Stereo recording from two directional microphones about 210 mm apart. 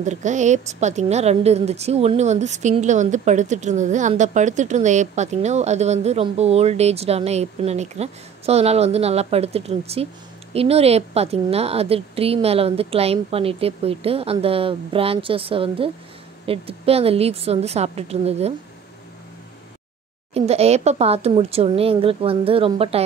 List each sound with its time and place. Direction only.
0.0 s a woman's voice: 35° right (ahead or behind)
20.3 s a woman's voice: 30° right (ahead or behind)